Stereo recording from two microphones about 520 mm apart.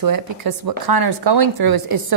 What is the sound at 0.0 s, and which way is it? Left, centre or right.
A woman's voice, right.